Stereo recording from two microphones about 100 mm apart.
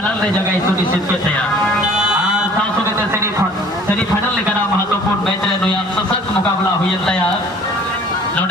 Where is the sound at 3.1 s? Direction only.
30° right (ahead or behind).